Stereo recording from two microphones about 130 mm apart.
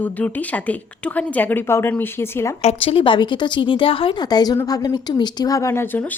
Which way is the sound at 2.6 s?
45° left (ahead or behind).